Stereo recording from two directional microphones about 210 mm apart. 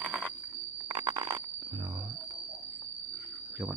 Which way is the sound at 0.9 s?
20° right (ahead or behind).